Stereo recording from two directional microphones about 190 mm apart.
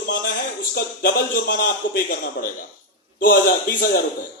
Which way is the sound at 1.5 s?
50° left (ahead or behind).